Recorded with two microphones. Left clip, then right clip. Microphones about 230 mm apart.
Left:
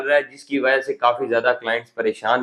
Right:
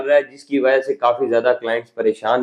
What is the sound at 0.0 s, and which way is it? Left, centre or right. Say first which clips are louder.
A man's voice: right 3 dB; left.